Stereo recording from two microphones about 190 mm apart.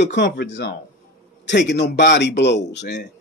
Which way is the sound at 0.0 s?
65° left (ahead or behind).